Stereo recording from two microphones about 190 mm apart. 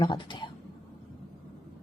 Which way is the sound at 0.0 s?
25° left (ahead or behind).